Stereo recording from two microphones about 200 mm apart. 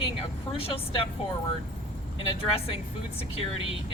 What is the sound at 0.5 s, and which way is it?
Speech, 25° left (ahead or behind).